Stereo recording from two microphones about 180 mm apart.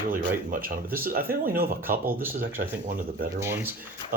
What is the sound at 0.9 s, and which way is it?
Speech, 55° right (ahead or behind).